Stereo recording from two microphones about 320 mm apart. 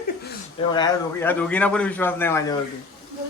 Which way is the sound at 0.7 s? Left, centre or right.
Centre.